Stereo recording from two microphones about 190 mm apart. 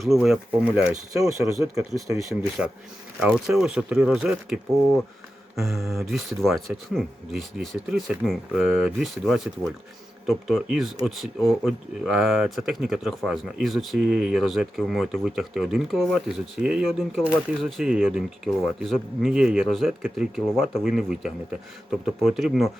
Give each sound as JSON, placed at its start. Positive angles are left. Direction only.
{"t": 0.0, "sound": "speech", "side_deg": 0}
{"t": 1.4, "sound": "speech", "side_deg": -15}
{"t": 3.2, "sound": "speech", "side_deg": -5}